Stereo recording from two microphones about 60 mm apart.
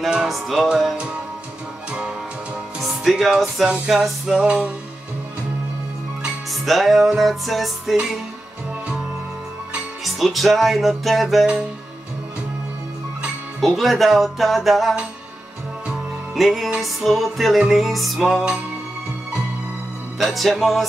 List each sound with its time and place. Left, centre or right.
0.1 s music: centre
1.9 s music: centre
2.8 s speech: centre
3.6 s music: centre
3.9 s music: centre
4.4 s music: centre
6.6 s music: centre
10.0 s music: centre
13.6 s music: centre
16.3 s music: centre
20.2 s music: centre